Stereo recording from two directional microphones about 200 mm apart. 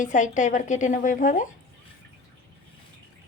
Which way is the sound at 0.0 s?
40° left (ahead or behind).